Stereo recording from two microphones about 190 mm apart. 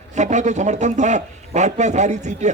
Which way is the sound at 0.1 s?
40° right (ahead or behind).